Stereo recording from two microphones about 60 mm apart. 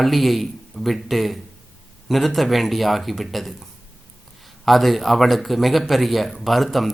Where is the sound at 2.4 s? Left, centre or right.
Centre.